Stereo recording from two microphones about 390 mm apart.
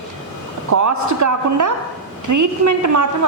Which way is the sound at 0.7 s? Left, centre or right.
Right.